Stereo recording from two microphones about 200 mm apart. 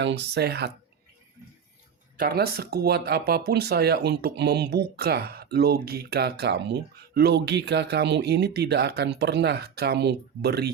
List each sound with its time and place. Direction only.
0.0 s speech: 60° right (ahead or behind)
2.1 s speech: 50° right (ahead or behind)